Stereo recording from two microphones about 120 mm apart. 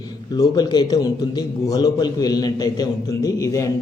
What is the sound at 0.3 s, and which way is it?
A man's voice, 35° left (ahead or behind).